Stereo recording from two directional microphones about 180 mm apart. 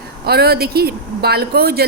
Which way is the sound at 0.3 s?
60° right (ahead or behind).